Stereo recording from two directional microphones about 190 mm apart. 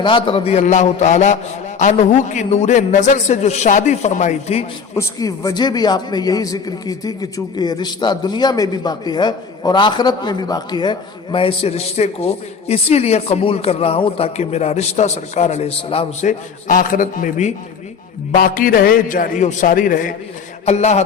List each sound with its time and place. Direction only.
0.0 s a man's voice: 25° left (ahead or behind)
4.9 s a man's voice: 15° left (ahead or behind); by 16.3 s 30° left (ahead or behind)
16.6 s a man's voice: 45° left (ahead or behind)